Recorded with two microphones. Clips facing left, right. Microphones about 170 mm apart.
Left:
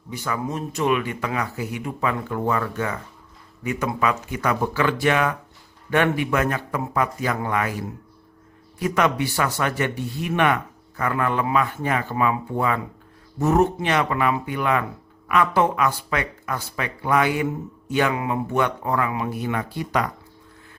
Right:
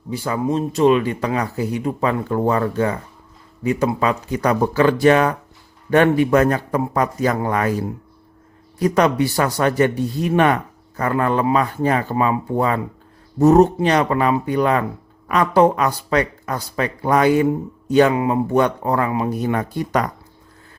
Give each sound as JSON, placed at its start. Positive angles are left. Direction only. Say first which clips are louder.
{"t": 0.1, "sound": "speech", "louder": "right 7 dB", "side_deg": -30}